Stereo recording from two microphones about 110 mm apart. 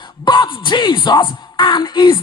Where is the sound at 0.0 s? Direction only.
45° left (ahead or behind).